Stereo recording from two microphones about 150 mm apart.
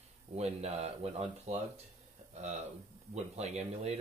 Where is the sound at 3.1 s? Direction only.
45° right (ahead or behind).